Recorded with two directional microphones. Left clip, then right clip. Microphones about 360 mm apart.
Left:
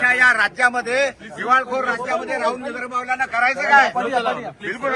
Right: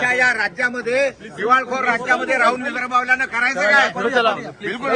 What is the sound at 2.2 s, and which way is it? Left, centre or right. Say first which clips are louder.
A man's voice: right 5 dB; centre.